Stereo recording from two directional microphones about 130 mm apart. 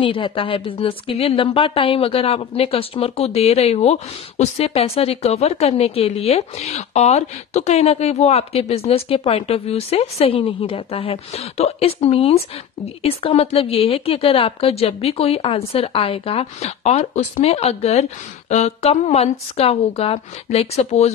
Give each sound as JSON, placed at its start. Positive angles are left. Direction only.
{"t": 0.0, "sound": "speech", "side_deg": 40}